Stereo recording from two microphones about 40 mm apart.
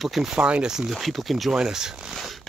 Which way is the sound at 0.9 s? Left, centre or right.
Centre.